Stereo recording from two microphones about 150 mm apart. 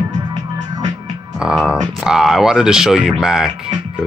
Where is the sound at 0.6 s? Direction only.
25° right (ahead or behind).